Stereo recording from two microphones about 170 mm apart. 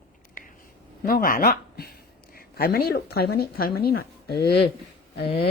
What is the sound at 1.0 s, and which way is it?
Speech, 55° left (ahead or behind).